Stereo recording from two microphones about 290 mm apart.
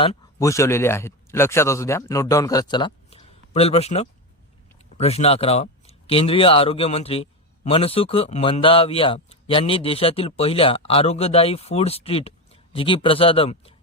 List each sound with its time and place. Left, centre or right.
0.0 s a man's voice: centre